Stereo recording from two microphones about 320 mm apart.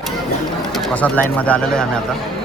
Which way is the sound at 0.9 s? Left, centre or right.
Centre.